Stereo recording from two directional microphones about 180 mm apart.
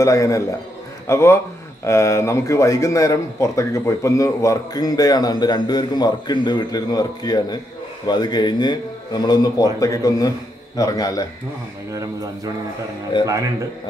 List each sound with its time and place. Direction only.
0.0 s a man's voice: 20° left (ahead or behind)
13.2 s speech: 15° right (ahead or behind)